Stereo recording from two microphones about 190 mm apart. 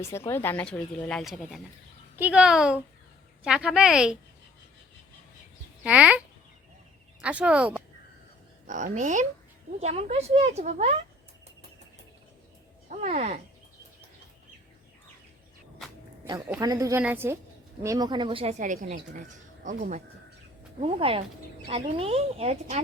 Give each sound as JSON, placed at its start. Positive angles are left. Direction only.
{"t": 0.0, "sound": "speech", "side_deg": 15}
{"t": 5.8, "sound": "speech", "side_deg": -5}
{"t": 8.6, "sound": "a woman's voice", "side_deg": -40}
{"t": 12.9, "sound": "a woman's voice", "side_deg": -40}
{"t": 16.6, "sound": "speech", "side_deg": -20}
{"t": 17.8, "sound": "a woman's voice", "side_deg": -20}
{"t": 20.8, "sound": "a woman's voice", "side_deg": -30}